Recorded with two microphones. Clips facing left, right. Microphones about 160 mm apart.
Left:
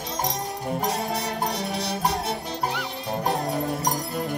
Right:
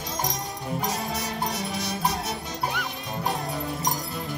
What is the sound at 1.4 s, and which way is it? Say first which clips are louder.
Music: left 2 dB; 35° left (ahead or behind).